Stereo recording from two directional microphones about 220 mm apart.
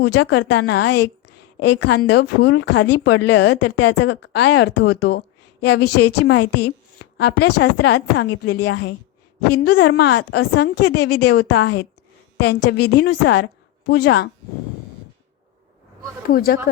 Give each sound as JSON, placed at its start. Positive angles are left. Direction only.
{"t": 0.0, "sound": "a woman's voice", "side_deg": 50}
{"t": 16.2, "sound": "speech", "side_deg": 40}